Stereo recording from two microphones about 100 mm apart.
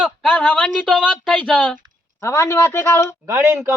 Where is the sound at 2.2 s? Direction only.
25° left (ahead or behind).